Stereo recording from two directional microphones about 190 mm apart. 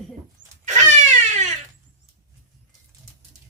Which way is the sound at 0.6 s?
40° right (ahead or behind).